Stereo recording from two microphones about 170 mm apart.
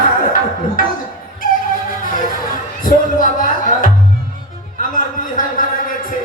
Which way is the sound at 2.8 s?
50° left (ahead or behind).